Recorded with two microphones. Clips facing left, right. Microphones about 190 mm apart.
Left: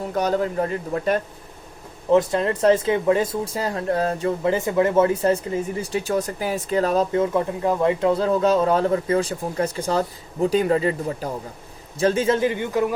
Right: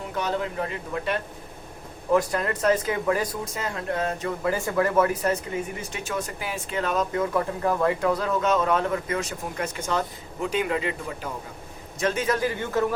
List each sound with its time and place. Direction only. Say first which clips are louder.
0.1 s speech: left 6 dB; 40° left (ahead or behind)
2.0 s speech: left 5 dB; 25° left (ahead or behind)